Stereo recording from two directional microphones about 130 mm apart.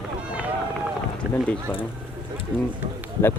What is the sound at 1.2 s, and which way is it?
Run, 10° right (ahead or behind).